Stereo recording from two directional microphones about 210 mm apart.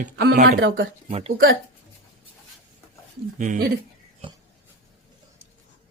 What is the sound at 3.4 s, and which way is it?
Speech, 40° right (ahead or behind).